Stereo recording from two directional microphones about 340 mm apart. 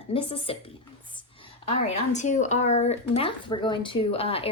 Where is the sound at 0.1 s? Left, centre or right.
Centre.